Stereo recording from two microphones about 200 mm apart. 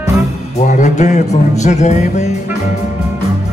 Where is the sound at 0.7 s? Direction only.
40° left (ahead or behind).